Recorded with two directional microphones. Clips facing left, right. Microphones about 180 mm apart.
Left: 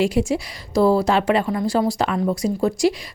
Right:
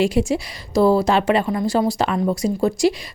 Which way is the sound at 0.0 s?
25° right (ahead or behind).